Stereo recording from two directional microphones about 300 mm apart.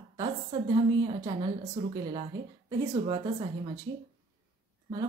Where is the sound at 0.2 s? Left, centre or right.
Centre.